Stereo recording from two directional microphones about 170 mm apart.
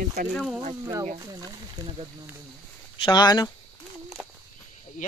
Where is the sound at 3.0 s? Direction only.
25° left (ahead or behind).